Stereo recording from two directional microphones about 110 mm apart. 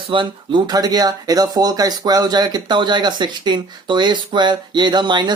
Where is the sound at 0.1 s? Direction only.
50° right (ahead or behind).